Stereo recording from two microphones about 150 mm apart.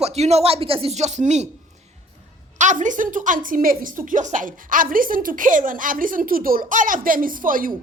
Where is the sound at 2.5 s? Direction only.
55° right (ahead or behind).